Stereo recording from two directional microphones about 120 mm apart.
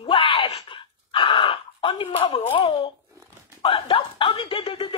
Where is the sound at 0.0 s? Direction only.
50° left (ahead or behind).